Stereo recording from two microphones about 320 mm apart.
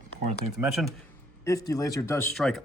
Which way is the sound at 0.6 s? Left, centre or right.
Centre.